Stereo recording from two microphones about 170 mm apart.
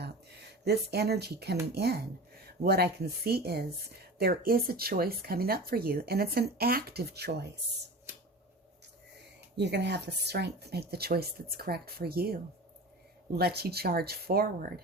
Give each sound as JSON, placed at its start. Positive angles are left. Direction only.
{"t": 0.0, "sound": "a sound", "side_deg": -75}
{"t": 1.7, "sound": "speech", "side_deg": -70}
{"t": 9.6, "sound": "speech", "side_deg": -85}